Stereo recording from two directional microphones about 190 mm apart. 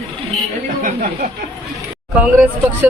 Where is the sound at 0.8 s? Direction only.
45° right (ahead or behind).